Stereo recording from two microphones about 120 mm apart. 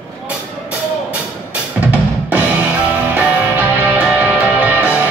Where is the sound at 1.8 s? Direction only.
10° right (ahead or behind).